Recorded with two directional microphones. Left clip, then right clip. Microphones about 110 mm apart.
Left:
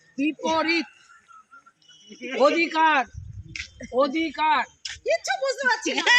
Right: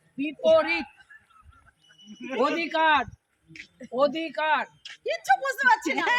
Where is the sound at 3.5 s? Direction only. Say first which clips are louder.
Left 9 dB; 40° left (ahead or behind).